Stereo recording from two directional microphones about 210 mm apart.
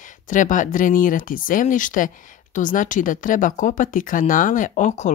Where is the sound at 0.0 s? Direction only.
40° left (ahead or behind).